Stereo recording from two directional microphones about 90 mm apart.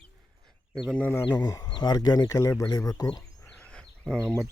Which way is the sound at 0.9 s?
15° left (ahead or behind).